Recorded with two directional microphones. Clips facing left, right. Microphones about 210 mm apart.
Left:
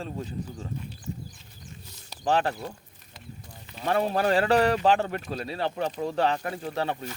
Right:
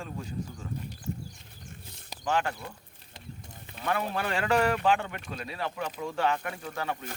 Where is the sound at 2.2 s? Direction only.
35° left (ahead or behind).